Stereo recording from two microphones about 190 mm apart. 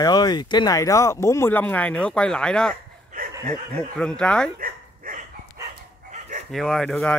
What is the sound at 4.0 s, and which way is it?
Speech, 5° left (ahead or behind).